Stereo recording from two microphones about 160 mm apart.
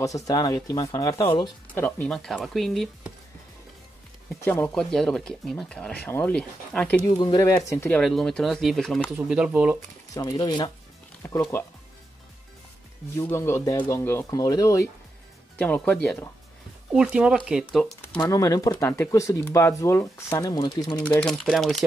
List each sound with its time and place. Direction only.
0.0 s speech: 20° left (ahead or behind)
1.8 s speech: 10° left (ahead or behind)
4.3 s speech: 10° left (ahead or behind)
7.1 s speech: 25° left (ahead or behind)
8.0 s speech: 5° left (ahead or behind)
10.1 s speech: 25° left (ahead or behind)
13.2 s speech: 15° left (ahead or behind)
16.9 s speech: 5° right (ahead or behind)
18.0 s shuffling cards: 10° left (ahead or behind)
18.3 s speech: 20° left (ahead or behind)
21.0 s speech: 5° left (ahead or behind)